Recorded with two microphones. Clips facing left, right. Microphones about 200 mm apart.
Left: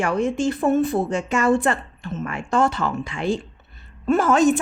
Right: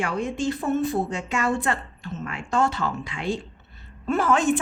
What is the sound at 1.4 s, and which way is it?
Speech, 50° left (ahead or behind).